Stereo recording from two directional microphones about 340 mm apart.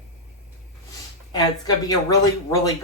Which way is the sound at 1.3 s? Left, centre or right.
Centre.